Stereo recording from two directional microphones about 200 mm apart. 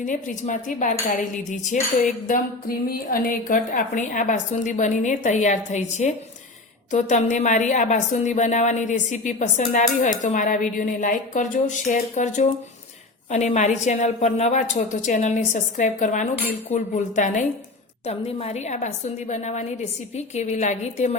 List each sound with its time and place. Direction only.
0.0 s cutlery: 40° left (ahead or behind)